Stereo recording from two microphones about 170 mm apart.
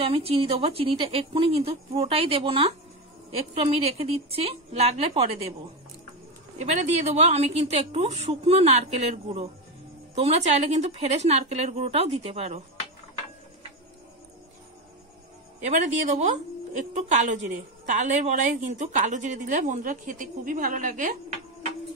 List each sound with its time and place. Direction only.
0.0 s a woman's voice: 35° right (ahead or behind)
6.6 s a woman's voice: 40° right (ahead or behind)
15.6 s speech: 45° right (ahead or behind)